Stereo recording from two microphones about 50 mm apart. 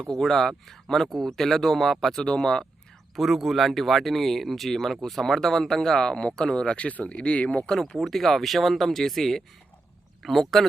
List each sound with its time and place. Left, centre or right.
0.0 s speech: centre
2.2 s speech: centre
3.2 s speech: centre; by 7.6 s left
7.7 s speech: centre